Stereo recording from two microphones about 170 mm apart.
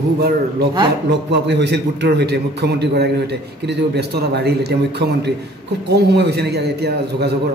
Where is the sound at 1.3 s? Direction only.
85° right.